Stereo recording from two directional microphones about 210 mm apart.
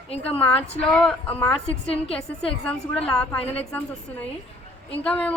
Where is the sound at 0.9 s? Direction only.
5° left (ahead or behind).